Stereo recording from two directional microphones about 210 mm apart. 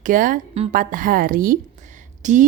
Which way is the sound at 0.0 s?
40° right (ahead or behind).